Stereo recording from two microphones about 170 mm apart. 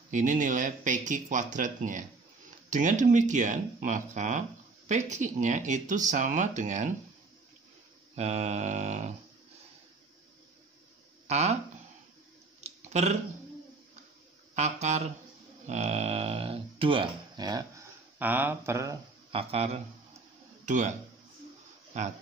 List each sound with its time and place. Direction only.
0.1 s speech: 50° right (ahead or behind)
8.2 s speech: 40° right (ahead or behind)
11.2 s speech: 40° right (ahead or behind)
12.5 s a sound: 40° right (ahead or behind)
14.5 s speech: 40° right (ahead or behind)
15.6 s a sound: 40° right (ahead or behind); by 17.8 s 25° right (ahead or behind)
18.2 s speech: 10° right (ahead or behind)
19.3 s a man's voice: 35° right (ahead or behind)
21.9 s speech: 45° right (ahead or behind)